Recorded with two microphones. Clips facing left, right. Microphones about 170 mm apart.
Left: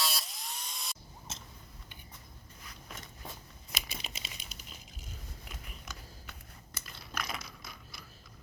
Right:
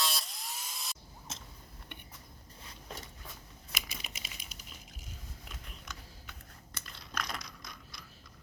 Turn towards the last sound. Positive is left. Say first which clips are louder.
# even
turn(degrees=5)  # may be behind; listen again after turning